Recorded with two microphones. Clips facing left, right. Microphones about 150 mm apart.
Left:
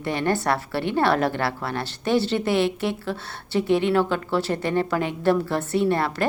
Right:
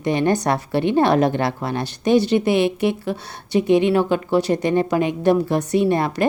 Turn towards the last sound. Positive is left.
turn(degrees=-15)  # may be behind; listen again after turning